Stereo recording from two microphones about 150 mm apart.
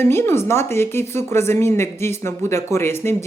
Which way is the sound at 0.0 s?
15° left (ahead or behind).